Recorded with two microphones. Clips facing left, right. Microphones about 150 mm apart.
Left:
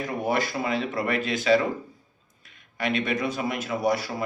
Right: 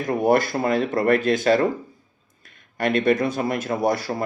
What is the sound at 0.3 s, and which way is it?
Speech, 50° right (ahead or behind).